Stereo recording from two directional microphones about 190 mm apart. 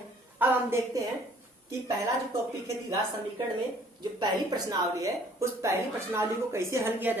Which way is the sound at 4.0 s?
20° right (ahead or behind).